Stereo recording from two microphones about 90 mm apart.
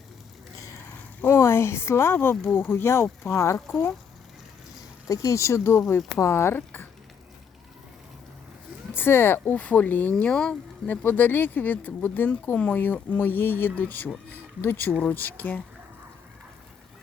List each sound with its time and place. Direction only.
1.2 s speech: 30° left (ahead or behind)
5.0 s speech: 35° left (ahead or behind)
8.9 s speech: 25° left (ahead or behind)